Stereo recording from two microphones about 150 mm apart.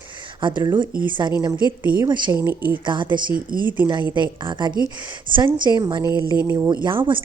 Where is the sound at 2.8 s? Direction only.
30° right (ahead or behind).